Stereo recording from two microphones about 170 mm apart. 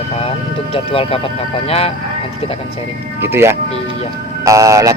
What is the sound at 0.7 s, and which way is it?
Speech, 35° left (ahead or behind).